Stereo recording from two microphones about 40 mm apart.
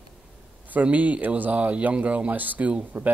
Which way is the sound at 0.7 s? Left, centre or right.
Right.